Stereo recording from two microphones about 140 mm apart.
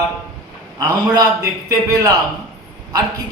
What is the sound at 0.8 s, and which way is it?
A man's voice, 30° right (ahead or behind).